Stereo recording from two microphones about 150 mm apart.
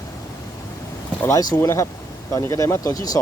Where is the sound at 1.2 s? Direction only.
15° left (ahead or behind).